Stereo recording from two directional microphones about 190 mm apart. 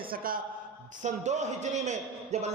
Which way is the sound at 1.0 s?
40° right (ahead or behind).